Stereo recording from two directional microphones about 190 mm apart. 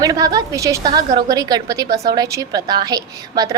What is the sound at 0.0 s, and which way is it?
A woman's voice, 20° right (ahead or behind).